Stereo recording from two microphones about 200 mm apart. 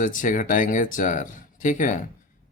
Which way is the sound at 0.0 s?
40° left (ahead or behind).